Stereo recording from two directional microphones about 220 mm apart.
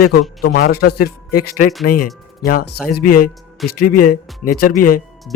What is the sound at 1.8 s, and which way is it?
Speech, 90° left.